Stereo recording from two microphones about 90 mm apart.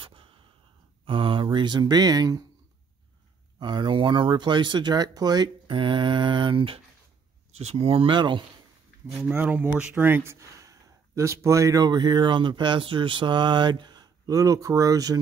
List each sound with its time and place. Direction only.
0.0 s gasp: 75° right (ahead or behind)
1.0 s speech: 70° right (ahead or behind); by 2.4 s 45° right (ahead or behind)
3.5 s speech: 55° right (ahead or behind)
5.7 s mantra: 65° right (ahead or behind)
7.7 s mantra: 90° right; by 8.5 s 60° right (ahead or behind)
9.0 s speech: 5° right (ahead or behind)
9.3 s speech: 20° right (ahead or behind)
10.4 s speech: 35° right (ahead or behind)